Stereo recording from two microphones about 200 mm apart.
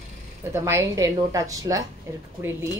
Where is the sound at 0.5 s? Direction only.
15° right (ahead or behind).